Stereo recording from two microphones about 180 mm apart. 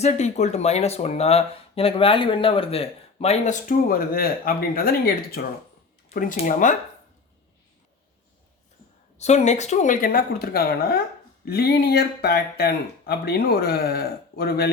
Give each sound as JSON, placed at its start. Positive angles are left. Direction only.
{"t": 0.0, "sound": "speech", "side_deg": 40}
{"t": 9.1, "sound": "speech", "side_deg": 40}